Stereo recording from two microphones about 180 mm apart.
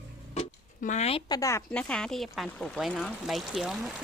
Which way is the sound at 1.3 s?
15° left (ahead or behind).